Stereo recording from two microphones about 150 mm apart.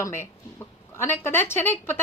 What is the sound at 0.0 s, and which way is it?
A woman's voice, 15° left (ahead or behind).